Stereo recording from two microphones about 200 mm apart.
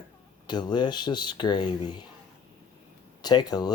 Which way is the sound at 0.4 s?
20° left (ahead or behind).